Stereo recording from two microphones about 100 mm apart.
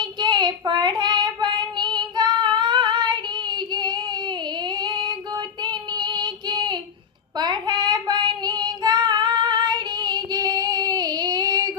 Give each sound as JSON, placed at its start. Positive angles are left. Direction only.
{"t": 0.0, "sound": "child singing", "side_deg": -50}
{"t": 4.8, "sound": "female singing", "side_deg": -50}
{"t": 5.6, "sound": "child singing", "side_deg": -45}